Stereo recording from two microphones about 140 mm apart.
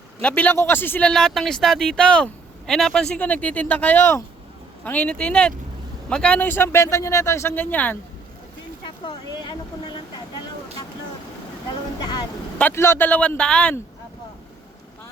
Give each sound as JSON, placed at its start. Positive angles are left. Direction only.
{"t": 0.2, "sound": "a man's voice", "side_deg": 10}
{"t": 9.0, "sound": "speech", "side_deg": 30}
{"t": 11.9, "sound": "speech", "side_deg": 30}
{"t": 12.5, "sound": "a man's voice", "side_deg": 15}